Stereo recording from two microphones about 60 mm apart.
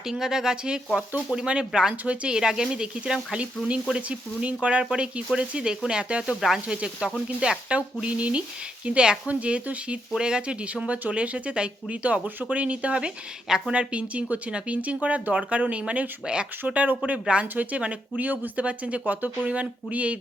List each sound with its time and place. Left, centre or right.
0.1 s speech: centre; by 20.1 s right